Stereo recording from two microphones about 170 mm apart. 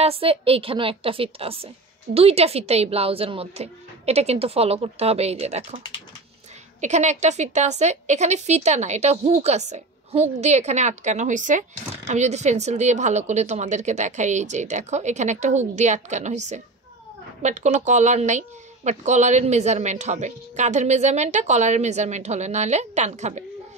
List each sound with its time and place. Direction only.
0.0 s speech: 35° right (ahead or behind)
6.8 s a woman's voice: 45° right (ahead or behind)